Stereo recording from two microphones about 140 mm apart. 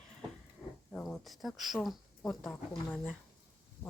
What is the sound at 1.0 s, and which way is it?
Speech, centre (ahead or behind).